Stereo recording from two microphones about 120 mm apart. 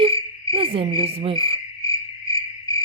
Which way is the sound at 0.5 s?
50° right (ahead or behind).